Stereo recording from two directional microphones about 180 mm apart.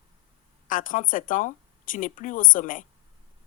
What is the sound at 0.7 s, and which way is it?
Speech, 50° left (ahead or behind).